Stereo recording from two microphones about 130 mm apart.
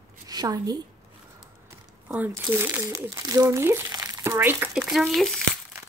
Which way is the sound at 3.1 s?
30° right (ahead or behind).